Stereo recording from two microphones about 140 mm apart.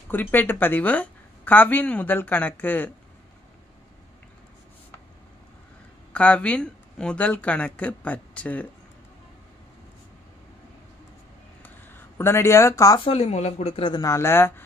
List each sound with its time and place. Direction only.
0.1 s a woman's voice: 15° left (ahead or behind)
6.1 s a woman's voice: 10° left (ahead or behind)
12.2 s speech: 20° left (ahead or behind)
13.0 s speech: 45° left (ahead or behind)
14.0 s a woman's voice: 20° left (ahead or behind)